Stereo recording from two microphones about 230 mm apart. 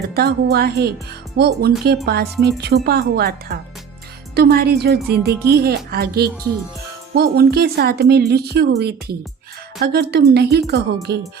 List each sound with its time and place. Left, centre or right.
0.1 s speech: right